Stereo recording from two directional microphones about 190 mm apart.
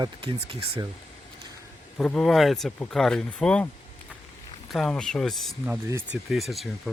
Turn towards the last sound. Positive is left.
turn(degrees=0)  # may be behind; listen again after turning